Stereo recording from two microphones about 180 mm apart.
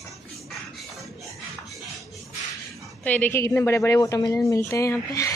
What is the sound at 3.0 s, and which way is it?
A woman's voice, 10° left (ahead or behind).